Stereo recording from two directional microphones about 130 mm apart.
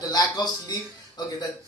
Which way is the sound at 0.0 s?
30° left (ahead or behind).